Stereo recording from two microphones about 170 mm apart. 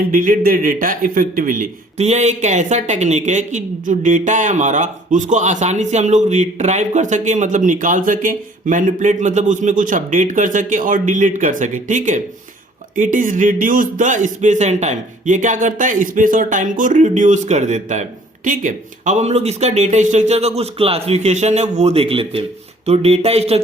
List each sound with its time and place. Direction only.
0.1 s a man's voice: 55° right (ahead or behind); by 23.6 s 35° right (ahead or behind)